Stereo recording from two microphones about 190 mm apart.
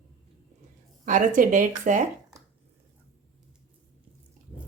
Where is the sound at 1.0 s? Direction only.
45° right (ahead or behind).